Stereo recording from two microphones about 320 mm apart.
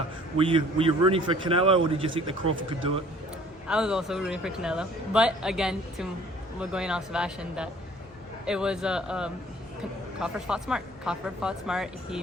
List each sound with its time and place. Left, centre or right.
0.3 s a man's voice: centre
3.7 s a man's voice: centre